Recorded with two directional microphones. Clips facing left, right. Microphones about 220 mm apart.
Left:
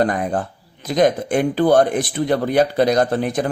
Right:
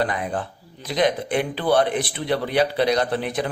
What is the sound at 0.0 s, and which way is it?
Speech, 45° left (ahead or behind).